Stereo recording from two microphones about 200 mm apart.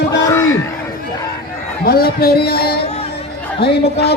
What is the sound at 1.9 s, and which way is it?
Speech, 50° left (ahead or behind).